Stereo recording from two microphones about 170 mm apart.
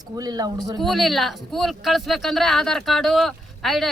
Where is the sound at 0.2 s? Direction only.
25° right (ahead or behind).